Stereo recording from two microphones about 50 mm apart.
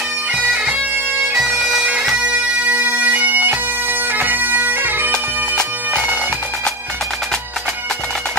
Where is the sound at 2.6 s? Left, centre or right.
Right.